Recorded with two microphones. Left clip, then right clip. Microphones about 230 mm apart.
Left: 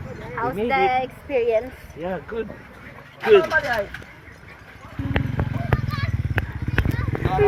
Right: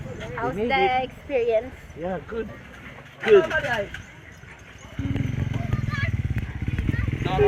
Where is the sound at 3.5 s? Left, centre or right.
Right.